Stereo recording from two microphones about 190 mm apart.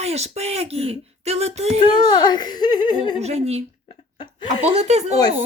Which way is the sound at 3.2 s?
35° right (ahead or behind).